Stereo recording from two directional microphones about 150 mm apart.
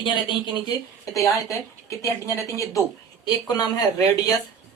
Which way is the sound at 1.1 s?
20° left (ahead or behind).